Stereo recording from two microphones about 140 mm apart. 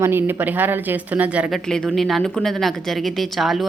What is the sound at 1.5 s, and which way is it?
A woman's voice, centre (ahead or behind).